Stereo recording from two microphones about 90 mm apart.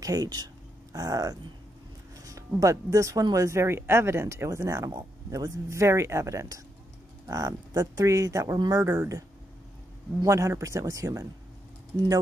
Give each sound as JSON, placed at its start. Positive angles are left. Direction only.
{"t": 0.0, "sound": "speech", "side_deg": -45}
{"t": 8.5, "sound": "speech", "side_deg": -50}
{"t": 8.8, "sound": "speech", "side_deg": -35}
{"t": 10.2, "sound": "speech", "side_deg": -35}